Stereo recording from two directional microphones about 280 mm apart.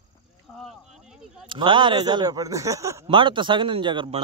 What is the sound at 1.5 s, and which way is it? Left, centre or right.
Speech, centre.